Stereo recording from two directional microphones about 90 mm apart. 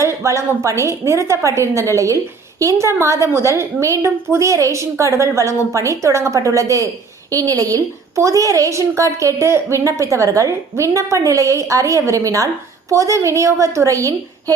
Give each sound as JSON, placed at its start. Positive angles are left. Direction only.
{"t": 0.0, "sound": "a woman's voice", "side_deg": -35}